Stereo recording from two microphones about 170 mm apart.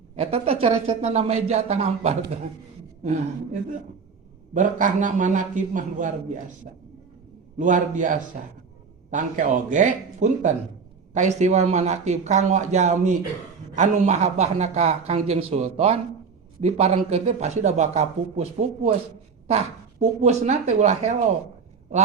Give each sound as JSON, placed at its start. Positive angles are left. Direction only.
{"t": 0.2, "sound": "speech", "side_deg": -35}
{"t": 7.6, "sound": "speech", "side_deg": -50}